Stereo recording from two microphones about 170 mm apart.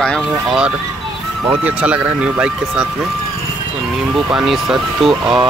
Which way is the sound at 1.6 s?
5° right (ahead or behind).